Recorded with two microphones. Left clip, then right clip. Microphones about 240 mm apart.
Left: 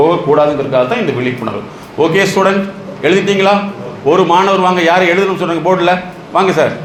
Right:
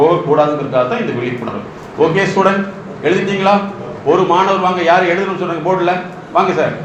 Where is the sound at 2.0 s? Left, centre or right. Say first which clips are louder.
Left 2 dB; left.